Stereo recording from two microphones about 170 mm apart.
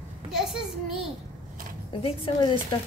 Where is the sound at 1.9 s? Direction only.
30° left (ahead or behind).